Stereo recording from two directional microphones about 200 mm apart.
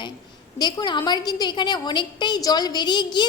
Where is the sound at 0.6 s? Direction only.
25° left (ahead or behind).